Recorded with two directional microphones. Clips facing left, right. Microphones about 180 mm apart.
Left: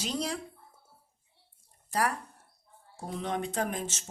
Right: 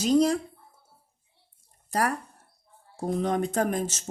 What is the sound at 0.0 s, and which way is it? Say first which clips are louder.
Speech: right 12 dB; 45° right (ahead or behind).